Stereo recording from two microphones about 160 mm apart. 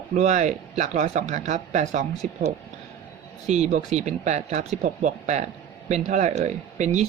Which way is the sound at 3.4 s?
45° right (ahead or behind).